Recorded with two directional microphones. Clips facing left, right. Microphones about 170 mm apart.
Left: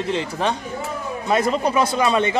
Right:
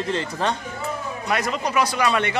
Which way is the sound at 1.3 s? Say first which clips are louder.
Left 5 dB; 25° left (ahead or behind).